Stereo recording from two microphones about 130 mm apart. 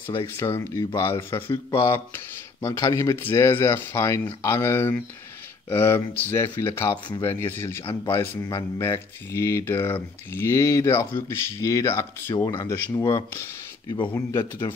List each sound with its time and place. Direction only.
0.0 s speech: 20° left (ahead or behind)